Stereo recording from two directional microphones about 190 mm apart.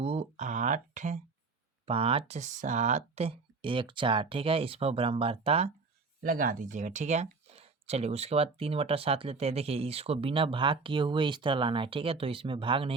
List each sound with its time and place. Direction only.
0.0 s a sound: 30° right (ahead or behind)
1.9 s speech: 30° right (ahead or behind)
6.2 s speech: 45° right (ahead or behind); by 12.9 s 25° right (ahead or behind)